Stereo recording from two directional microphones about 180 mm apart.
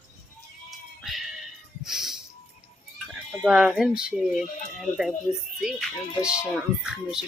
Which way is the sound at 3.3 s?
5° right (ahead or behind).